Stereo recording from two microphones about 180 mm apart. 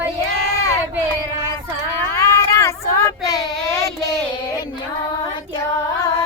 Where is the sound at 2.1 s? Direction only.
15° left (ahead or behind).